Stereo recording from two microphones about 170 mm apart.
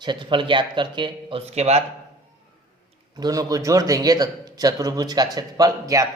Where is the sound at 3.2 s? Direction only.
20° right (ahead or behind).